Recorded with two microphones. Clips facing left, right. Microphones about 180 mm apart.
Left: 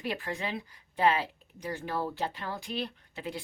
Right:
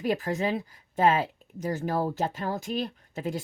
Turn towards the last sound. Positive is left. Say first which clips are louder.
# right 6 dB
turn(degrees=-45)  # may be behind; listen again after turning